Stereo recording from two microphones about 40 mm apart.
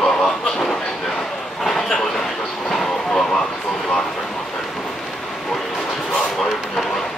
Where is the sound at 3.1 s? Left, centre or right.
Centre.